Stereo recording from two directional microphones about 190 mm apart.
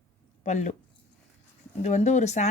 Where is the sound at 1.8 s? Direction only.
40° left (ahead or behind).